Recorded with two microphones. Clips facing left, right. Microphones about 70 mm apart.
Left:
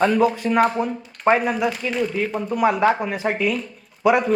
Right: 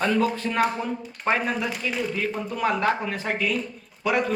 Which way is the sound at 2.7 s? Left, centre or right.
Centre.